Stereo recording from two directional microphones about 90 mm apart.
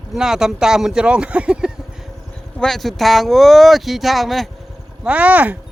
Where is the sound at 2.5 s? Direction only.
5° left (ahead or behind).